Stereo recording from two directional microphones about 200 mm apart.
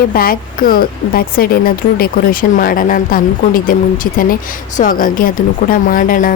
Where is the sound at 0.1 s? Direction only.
45° left (ahead or behind).